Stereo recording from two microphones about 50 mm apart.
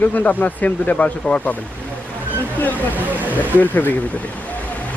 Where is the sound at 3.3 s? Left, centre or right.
Left.